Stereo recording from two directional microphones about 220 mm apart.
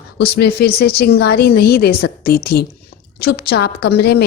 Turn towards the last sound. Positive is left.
turn(degrees=45)  # may be behind; listen again after turning